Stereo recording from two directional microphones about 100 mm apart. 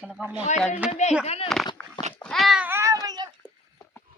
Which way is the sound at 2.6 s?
25° right (ahead or behind).